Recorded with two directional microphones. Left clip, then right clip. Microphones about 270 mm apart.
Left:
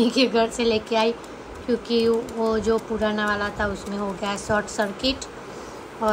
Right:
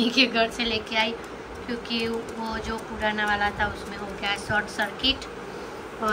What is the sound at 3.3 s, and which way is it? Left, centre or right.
Speech, centre.